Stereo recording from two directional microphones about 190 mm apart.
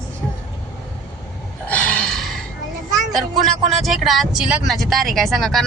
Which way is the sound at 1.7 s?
5° left (ahead or behind).